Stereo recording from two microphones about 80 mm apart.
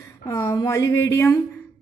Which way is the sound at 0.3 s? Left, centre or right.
Left.